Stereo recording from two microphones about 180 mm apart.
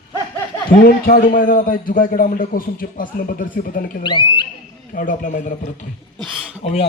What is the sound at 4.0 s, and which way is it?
Speech, 25° left (ahead or behind).